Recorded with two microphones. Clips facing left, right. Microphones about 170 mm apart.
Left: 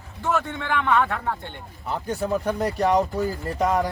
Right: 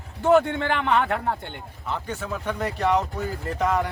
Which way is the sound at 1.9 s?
40° left (ahead or behind).